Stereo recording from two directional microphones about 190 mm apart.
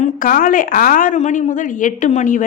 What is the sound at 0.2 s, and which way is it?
A woman's voice, 45° left (ahead or behind).